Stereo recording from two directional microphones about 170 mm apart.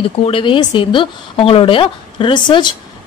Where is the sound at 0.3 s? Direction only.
30° left (ahead or behind).